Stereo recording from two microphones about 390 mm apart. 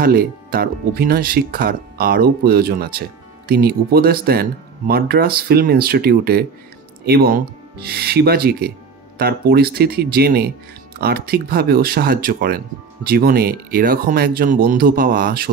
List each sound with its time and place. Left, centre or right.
0.0 s speech: right